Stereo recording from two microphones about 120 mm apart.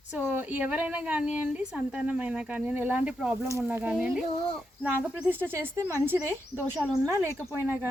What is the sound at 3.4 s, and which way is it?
Speech, 25° right (ahead or behind).